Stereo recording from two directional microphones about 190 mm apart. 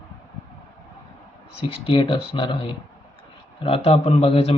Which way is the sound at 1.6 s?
30° left (ahead or behind).